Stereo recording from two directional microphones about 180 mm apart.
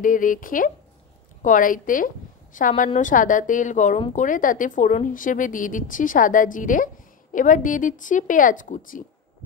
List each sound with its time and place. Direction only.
0.0 s a woman's voice: 50° left (ahead or behind)